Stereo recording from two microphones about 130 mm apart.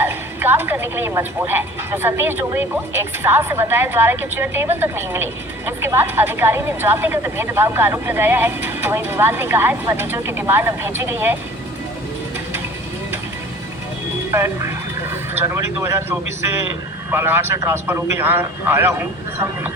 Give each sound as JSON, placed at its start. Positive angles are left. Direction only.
{"t": 0.0, "sound": "a woman's voice", "side_deg": -15}
{"t": 14.3, "sound": "a man's voice", "side_deg": -20}